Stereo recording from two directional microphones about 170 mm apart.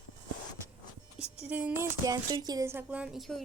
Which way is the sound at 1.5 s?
10° right (ahead or behind).